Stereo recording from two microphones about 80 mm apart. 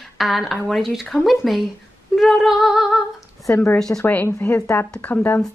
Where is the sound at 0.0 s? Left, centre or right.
Centre.